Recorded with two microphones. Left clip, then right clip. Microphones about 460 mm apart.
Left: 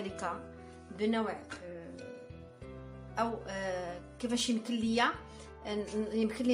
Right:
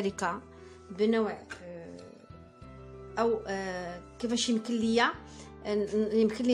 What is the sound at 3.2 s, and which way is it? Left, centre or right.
A woman's voice, right.